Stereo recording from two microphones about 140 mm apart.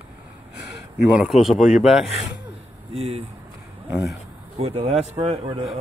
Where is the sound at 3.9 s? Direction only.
5° right (ahead or behind).